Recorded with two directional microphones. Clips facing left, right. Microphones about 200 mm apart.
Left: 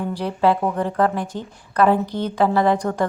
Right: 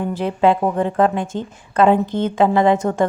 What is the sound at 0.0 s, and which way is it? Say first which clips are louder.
Speech: right 3 dB; 20° right (ahead or behind).